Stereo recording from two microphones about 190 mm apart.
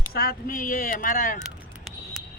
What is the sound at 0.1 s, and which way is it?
Speech, 50° left (ahead or behind).